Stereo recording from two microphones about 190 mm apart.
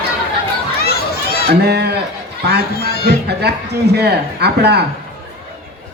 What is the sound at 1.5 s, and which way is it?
Speech, 60° right (ahead or behind).